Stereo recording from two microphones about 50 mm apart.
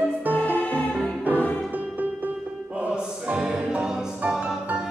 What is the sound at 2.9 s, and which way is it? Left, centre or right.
Music, centre.